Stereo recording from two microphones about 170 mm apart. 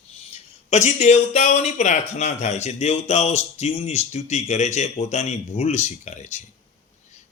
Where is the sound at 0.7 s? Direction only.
45° left (ahead or behind).